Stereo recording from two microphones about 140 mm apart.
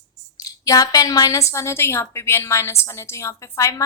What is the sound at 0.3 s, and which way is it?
A woman's voice, 25° left (ahead or behind).